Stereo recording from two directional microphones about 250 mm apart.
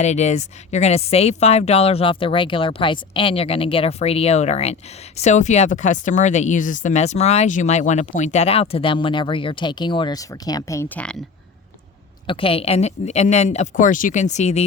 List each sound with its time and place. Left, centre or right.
0.0 s a woman's voice: left; by 11.2 s centre
12.3 s a woman's voice: left